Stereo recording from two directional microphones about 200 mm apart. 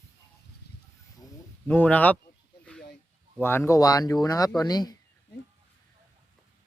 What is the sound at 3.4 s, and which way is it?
Speech, 10° left (ahead or behind).